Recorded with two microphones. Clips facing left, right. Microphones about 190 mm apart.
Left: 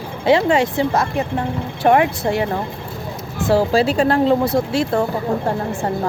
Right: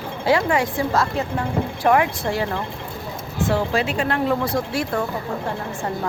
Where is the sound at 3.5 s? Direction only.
35° left (ahead or behind).